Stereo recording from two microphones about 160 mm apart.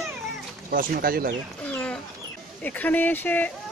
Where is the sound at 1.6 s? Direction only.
10° left (ahead or behind).